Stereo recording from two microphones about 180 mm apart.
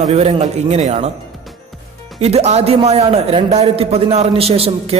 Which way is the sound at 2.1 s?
35° right (ahead or behind).